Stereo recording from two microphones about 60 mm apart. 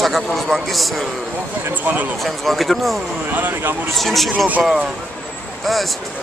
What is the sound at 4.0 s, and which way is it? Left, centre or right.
Speech, centre.